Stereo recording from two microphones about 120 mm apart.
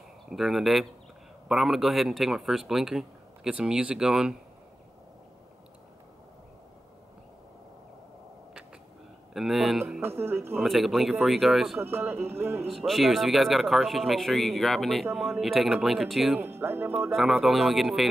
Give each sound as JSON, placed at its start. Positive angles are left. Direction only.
{"t": 0.3, "sound": "speech", "side_deg": 0}
{"t": 9.3, "sound": "speech", "side_deg": 0}
{"t": 10.0, "sound": "speech", "side_deg": -20}
{"t": 10.6, "sound": "speech", "side_deg": 0}
{"t": 11.8, "sound": "speech", "side_deg": -20}
{"t": 12.6, "sound": "speech", "side_deg": 0}
{"t": 16.3, "sound": "speech", "side_deg": -20}
{"t": 17.1, "sound": "speech", "side_deg": 0}